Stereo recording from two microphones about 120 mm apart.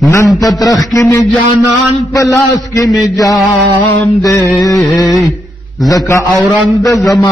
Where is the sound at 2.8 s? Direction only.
Centre (ahead or behind).